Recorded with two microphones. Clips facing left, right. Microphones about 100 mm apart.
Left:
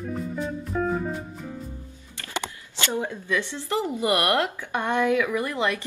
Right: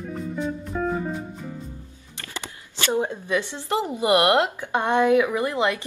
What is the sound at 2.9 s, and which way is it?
A woman's voice, 20° right (ahead or behind).